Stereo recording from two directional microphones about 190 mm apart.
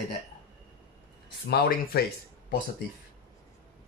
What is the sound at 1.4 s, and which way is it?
Speech, 55° left (ahead or behind).